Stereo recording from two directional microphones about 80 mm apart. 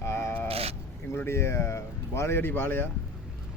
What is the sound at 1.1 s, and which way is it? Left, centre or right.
Speech, left.